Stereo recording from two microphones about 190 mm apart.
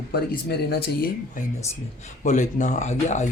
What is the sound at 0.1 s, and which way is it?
Speech, 55° left (ahead or behind).